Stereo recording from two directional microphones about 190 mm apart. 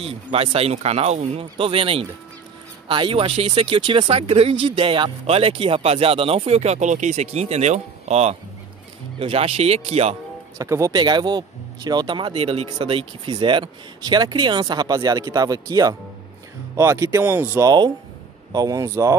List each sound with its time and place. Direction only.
0.0 s speech: 30° right (ahead or behind)
10.6 s speech: 15° right (ahead or behind)